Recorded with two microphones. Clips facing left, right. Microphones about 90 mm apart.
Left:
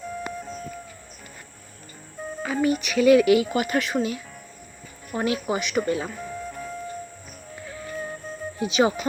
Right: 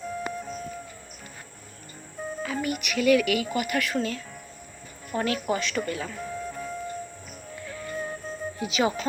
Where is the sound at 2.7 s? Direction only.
25° left (ahead or behind).